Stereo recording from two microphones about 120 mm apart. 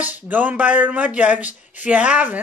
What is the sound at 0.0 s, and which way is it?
Speech, 15° right (ahead or behind).